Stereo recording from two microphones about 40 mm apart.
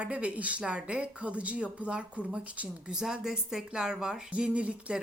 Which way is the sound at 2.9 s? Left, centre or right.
Centre.